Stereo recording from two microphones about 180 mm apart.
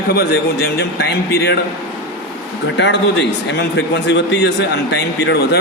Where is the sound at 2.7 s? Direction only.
75° left (ahead or behind).